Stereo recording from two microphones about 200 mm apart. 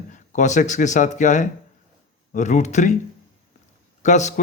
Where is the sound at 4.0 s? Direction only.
35° left (ahead or behind).